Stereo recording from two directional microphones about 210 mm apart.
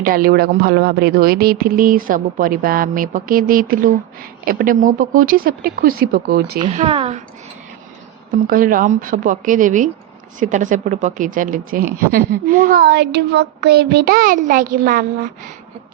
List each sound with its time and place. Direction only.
0.0 s speech: 40° right (ahead or behind)
6.6 s speech: 25° right (ahead or behind)
8.4 s speech: 40° right (ahead or behind)